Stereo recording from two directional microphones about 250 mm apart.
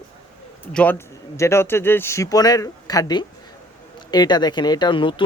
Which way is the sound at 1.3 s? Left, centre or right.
Centre.